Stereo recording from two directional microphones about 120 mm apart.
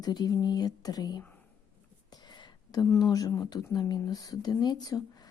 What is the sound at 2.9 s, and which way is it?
Speech, 30° left (ahead or behind).